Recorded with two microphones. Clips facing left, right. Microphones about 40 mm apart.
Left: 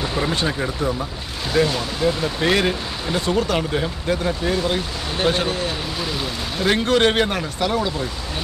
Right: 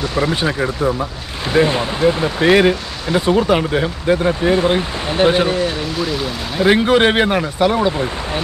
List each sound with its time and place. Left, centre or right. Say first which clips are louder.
0.3 s speech: right 4 dB; centre
5.9 s speech: right 5 dB; centre
6.6 s speech: right 5 dB; centre